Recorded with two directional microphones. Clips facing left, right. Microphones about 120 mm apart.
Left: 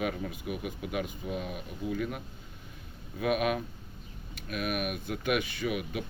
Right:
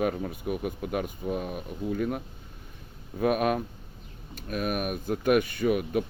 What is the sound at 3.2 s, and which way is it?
Speech, 40° right (ahead or behind).